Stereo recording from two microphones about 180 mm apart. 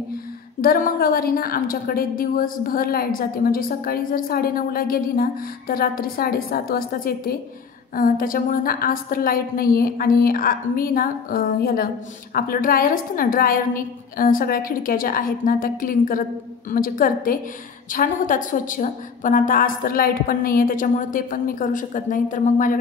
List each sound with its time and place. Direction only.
0.6 s a woman's voice: 55° left (ahead or behind)